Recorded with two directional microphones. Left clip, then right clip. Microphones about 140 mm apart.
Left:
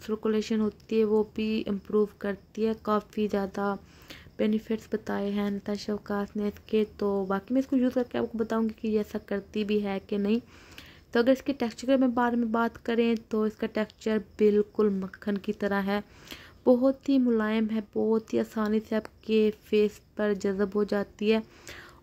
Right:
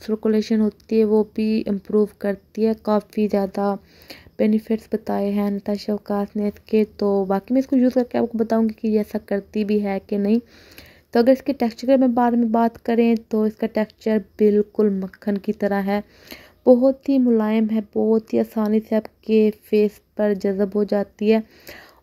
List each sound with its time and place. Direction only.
0.0 s speech: 25° right (ahead or behind)